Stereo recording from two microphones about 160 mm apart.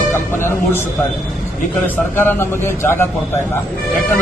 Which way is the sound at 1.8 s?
15° left (ahead or behind).